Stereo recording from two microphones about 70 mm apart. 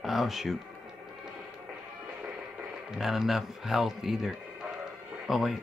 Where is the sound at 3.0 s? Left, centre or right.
Centre.